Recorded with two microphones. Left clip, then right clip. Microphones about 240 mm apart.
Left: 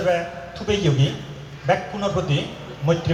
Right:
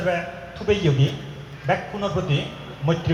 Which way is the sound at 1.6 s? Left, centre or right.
Left.